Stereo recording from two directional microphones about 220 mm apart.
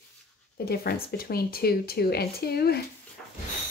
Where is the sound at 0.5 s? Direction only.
45° left (ahead or behind).